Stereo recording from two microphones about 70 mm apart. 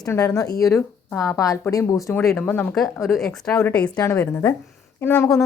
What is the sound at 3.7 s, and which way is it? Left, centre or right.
Speech, centre.